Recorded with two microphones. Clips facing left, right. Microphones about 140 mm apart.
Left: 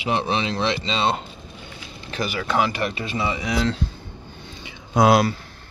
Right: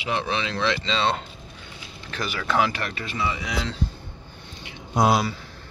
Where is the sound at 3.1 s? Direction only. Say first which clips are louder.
Right 1 dB; 25° left (ahead or behind).